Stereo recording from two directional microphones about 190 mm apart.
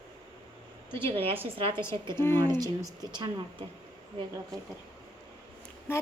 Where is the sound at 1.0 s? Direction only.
30° right (ahead or behind).